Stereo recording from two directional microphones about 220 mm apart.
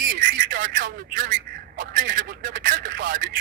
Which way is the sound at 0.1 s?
35° right (ahead or behind).